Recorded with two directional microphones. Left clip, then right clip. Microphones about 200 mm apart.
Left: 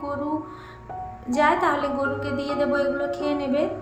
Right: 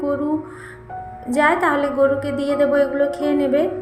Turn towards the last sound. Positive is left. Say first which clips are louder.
# right 6 dB
turn(degrees=-20)  # may be behind; listen again after turning